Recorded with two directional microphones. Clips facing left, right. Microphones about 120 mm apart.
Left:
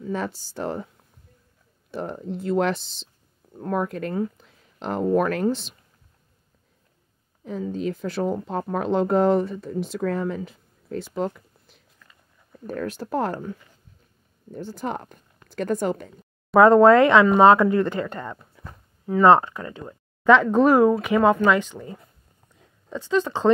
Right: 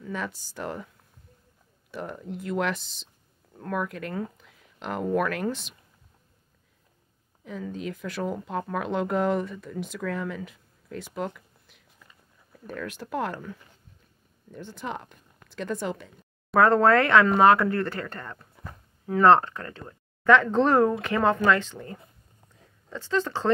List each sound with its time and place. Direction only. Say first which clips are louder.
0.0 s speech: left 5 dB; 35° left (ahead or behind)
1.9 s speech: left 5 dB; 30° left (ahead or behind)
7.4 s speech: left 6 dB; 35° left (ahead or behind)
14.5 s speech: left 5 dB; 40° left (ahead or behind)
16.5 s speech: left 6 dB; 20° left (ahead or behind)
18.6 s a sound: even; centre (ahead or behind)
19.2 s speech: left 2 dB; 10° left (ahead or behind)